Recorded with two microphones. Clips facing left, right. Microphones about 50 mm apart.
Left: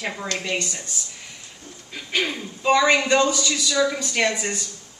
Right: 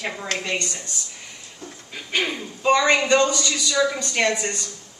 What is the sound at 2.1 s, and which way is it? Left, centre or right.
A man's voice, centre.